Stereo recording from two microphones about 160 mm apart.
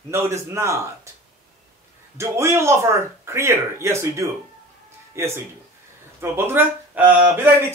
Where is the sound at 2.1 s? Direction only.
15° right (ahead or behind).